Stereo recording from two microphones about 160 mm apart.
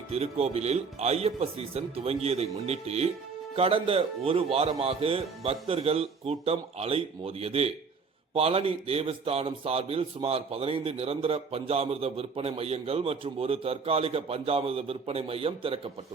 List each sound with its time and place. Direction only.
0.1 s a man's voice: 40° right (ahead or behind)